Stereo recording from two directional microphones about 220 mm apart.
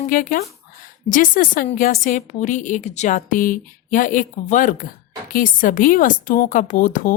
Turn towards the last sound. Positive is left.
turn(degrees=35)  # may be behind; listen again after turning